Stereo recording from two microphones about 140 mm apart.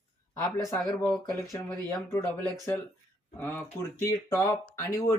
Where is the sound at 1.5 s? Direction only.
20° left (ahead or behind).